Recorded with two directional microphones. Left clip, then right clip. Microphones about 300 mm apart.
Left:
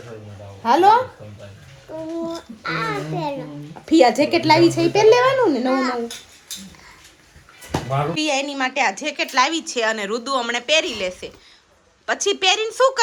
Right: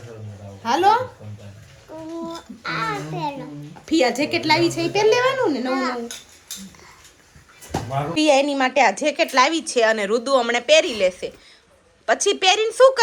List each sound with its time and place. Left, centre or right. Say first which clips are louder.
0.6 s a woman's voice: left 3 dB; centre
5.8 s speech: left 2 dB; right
8.1 s a woman's voice: right 5 dB; centre